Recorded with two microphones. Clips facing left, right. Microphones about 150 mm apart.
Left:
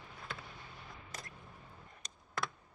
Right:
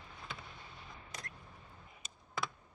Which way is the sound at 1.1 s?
Centre (ahead or behind).